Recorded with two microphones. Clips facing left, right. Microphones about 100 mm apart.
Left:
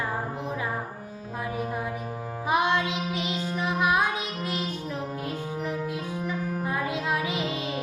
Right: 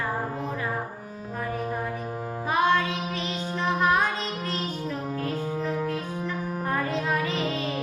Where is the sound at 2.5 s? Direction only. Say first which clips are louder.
Right 1 dB; 15° left (ahead or behind).